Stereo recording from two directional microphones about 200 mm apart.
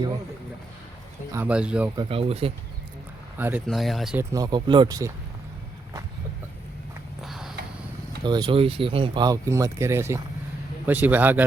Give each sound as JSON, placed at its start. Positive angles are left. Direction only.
{"t": 1.3, "sound": "speech", "side_deg": -10}
{"t": 2.0, "sound": "speech", "side_deg": -25}
{"t": 3.3, "sound": "speech", "side_deg": -10}
{"t": 3.7, "sound": "speech", "side_deg": 0}
{"t": 4.2, "sound": "speech", "side_deg": -15}
{"t": 7.2, "sound": "a sound", "side_deg": 0}
{"t": 8.2, "sound": "speech", "side_deg": -20}